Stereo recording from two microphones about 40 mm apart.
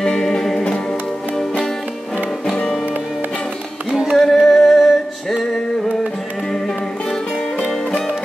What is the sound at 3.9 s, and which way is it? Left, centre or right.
Music, centre.